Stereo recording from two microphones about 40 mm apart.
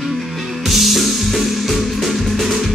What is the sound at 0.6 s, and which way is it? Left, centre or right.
Music, centre.